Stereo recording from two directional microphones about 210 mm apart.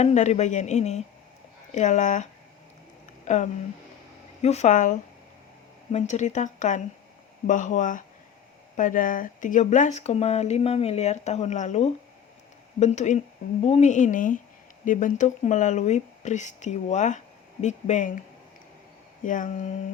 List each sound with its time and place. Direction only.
0.0 s speech: 35° left (ahead or behind)
3.2 s speech: 35° left (ahead or behind)
19.2 s speech: 40° left (ahead or behind)